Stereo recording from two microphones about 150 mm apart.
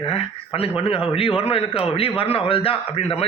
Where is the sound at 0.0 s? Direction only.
40° left (ahead or behind).